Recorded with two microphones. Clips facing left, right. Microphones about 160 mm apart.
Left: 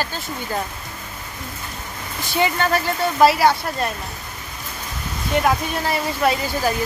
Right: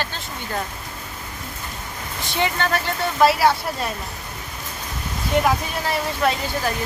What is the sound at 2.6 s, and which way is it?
Speech, 5° left (ahead or behind).